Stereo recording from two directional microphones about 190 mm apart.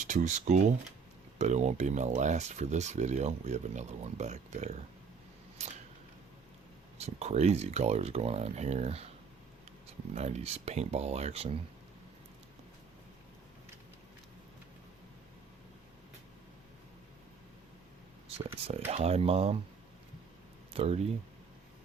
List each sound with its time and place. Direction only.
0.0 s speech: 40° right (ahead or behind)
5.6 s scissors: 35° right (ahead or behind)
7.0 s speech: 35° right (ahead or behind)
18.3 s a sound: 30° right (ahead or behind)
18.9 s speech: 35° right (ahead or behind)
20.7 s speech: 35° right (ahead or behind)